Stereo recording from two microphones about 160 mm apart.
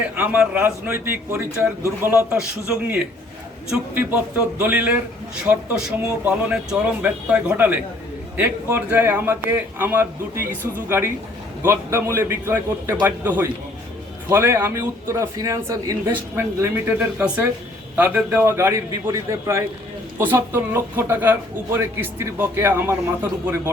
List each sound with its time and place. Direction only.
0.2 s speech: 10° right (ahead or behind)
3.7 s a man's voice: 5° right (ahead or behind)